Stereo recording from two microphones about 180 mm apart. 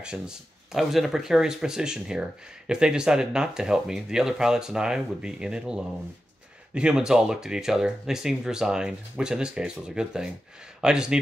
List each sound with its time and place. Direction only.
0.0 s speech: 5° right (ahead or behind)